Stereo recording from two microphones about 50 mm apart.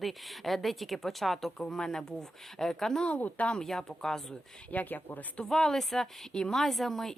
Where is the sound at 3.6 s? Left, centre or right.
Centre.